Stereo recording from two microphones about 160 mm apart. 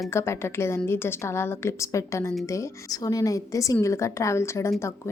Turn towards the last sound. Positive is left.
turn(degrees=15)  # may be behind; listen again after turning